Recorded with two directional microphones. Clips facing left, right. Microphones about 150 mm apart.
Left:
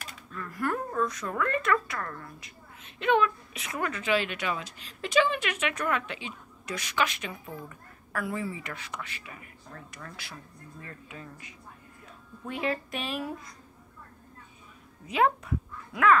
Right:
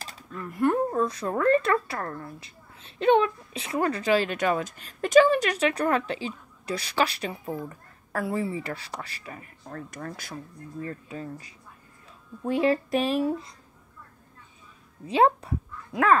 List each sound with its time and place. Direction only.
0.0 s speech: 25° right (ahead or behind)
15.0 s speech: 30° right (ahead or behind)